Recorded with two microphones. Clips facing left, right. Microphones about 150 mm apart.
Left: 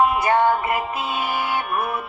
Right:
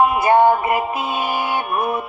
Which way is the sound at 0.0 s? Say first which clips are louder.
Right 4 dB; 15° right (ahead or behind).